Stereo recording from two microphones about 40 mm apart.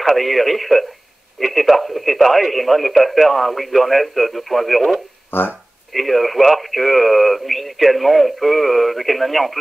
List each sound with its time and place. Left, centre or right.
0.0 s speech: centre
5.3 s speech: left
5.9 s speech: centre